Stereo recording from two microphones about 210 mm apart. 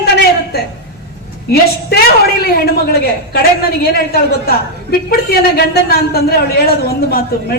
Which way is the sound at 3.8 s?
45° left (ahead or behind).